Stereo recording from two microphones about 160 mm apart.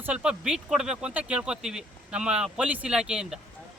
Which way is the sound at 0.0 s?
5° right (ahead or behind).